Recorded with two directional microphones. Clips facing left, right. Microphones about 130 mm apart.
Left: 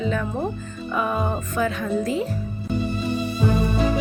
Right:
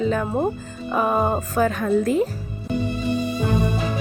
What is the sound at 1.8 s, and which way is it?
Speech, 50° right (ahead or behind).